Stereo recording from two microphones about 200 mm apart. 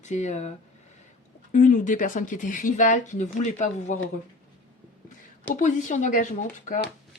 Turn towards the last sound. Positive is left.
turn(degrees=40)  # may be behind; listen again after turning